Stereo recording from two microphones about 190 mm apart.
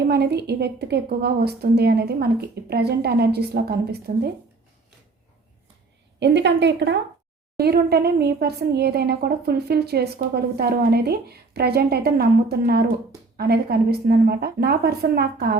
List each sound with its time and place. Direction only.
0.1 s speech: 60° right (ahead or behind)
6.1 s speech: 65° right (ahead or behind)